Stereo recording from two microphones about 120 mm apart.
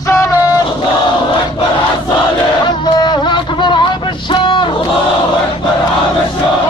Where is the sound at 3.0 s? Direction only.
40° left (ahead or behind).